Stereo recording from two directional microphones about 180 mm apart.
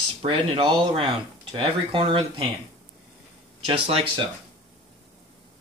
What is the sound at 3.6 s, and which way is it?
Speech, 30° right (ahead or behind).